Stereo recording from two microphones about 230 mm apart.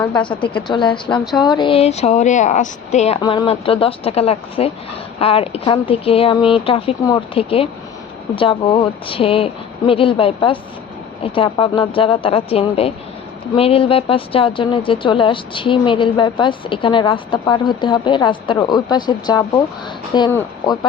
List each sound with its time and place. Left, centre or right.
0.3 s speech: left